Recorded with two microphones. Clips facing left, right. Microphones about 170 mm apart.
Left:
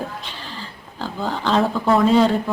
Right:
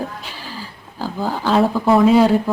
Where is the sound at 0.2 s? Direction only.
5° right (ahead or behind).